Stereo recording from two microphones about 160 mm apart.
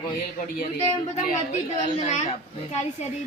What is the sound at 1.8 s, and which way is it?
Speech, 45° left (ahead or behind).